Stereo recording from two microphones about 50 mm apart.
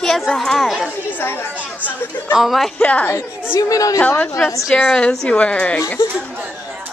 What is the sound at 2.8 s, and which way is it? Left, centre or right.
Speech, left.